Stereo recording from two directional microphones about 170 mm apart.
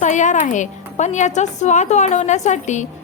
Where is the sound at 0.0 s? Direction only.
45° left (ahead or behind).